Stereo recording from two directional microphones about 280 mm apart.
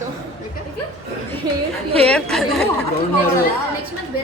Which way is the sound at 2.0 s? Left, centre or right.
Centre.